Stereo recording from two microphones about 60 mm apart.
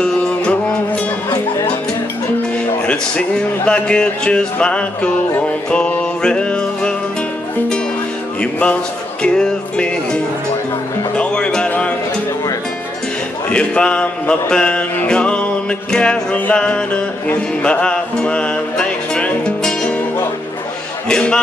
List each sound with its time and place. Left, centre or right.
0.0 s music: left
2.9 s speech: left
5.4 s music: left
8.4 s a sound: centre
9.2 s speech: centre
11.1 s music: centre
13.5 s a sound: centre
15.0 s music: centre
21.1 s speech: centre